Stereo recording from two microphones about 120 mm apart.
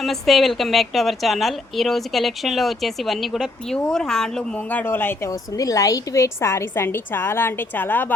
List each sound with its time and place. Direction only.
0.0 s a woman's voice: centre (ahead or behind); by 5.3 s 20° left (ahead or behind)
5.3 s a woman's voice: 30° left (ahead or behind)